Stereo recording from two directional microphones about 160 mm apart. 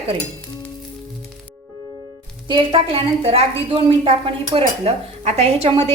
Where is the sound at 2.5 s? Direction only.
30° right (ahead or behind).